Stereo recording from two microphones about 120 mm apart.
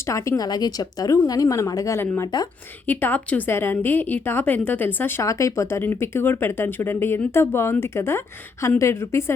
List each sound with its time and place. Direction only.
0.0 s a woman's voice: 25° left (ahead or behind)